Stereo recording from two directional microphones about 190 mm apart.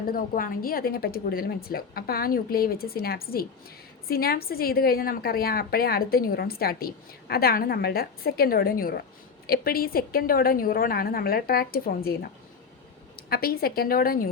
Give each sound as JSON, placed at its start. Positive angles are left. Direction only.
{"t": 0.0, "sound": "a woman's voice", "side_deg": 50}